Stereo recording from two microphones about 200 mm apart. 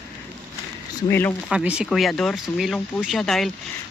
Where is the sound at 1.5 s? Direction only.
5° right (ahead or behind).